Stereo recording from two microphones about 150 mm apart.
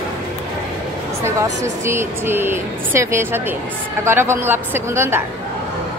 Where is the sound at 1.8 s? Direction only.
15° right (ahead or behind).